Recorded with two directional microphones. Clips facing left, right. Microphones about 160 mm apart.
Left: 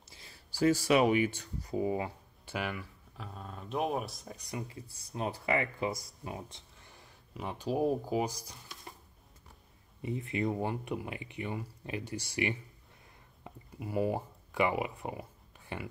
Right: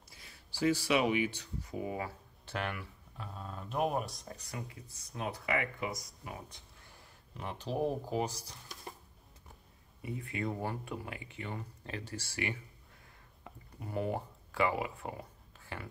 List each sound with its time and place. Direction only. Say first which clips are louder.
0.1 s a sound: left 2 dB; 25° left (ahead or behind)
0.5 s speech: left 4 dB; 45° left (ahead or behind)
1.7 s speech: left 6 dB; 30° left (ahead or behind)
2.4 s speech: left 1 dB; 5° left (ahead or behind)
4.6 s speech: left 4 dB; 30° left (ahead or behind)
7.3 s speech: left 3 dB; 10° left (ahead or behind)
10.0 s speech: left 5 dB; 25° left (ahead or behind)
13.7 s speech: left 4 dB; 10° left (ahead or behind)